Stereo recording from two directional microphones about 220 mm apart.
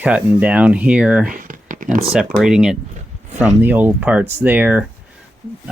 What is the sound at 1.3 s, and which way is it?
Speech, 40° right (ahead or behind).